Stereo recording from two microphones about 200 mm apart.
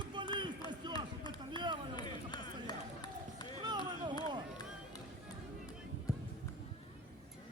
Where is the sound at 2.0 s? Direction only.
20° left (ahead or behind).